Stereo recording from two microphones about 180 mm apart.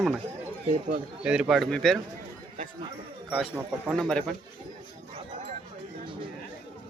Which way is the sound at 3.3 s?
10° right (ahead or behind).